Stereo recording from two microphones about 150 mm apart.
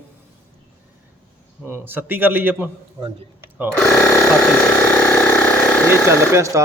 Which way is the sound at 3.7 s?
15° left (ahead or behind).